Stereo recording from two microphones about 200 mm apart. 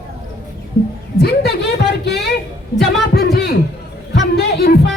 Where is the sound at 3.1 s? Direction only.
50° left (ahead or behind).